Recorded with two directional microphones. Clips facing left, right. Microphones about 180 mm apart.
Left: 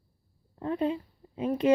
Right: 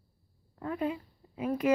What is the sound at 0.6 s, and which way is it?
Speech, 25° left (ahead or behind).